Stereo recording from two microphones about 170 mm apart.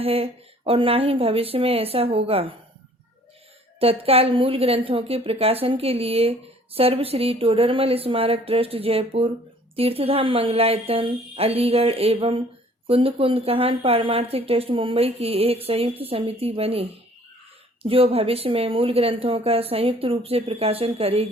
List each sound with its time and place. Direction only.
0.0 s speech: 35° right (ahead or behind)
3.8 s speech: 35° right (ahead or behind)
17.8 s speech: 35° right (ahead or behind)